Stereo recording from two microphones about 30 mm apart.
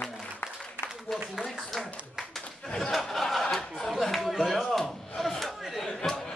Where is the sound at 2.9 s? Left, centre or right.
Centre.